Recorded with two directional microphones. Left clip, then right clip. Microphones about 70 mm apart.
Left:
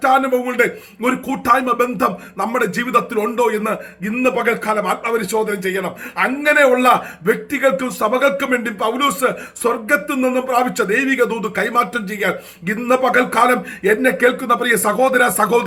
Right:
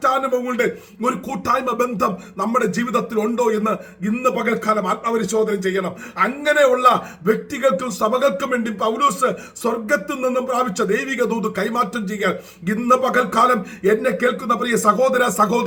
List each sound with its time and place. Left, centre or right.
0.0 s speech: right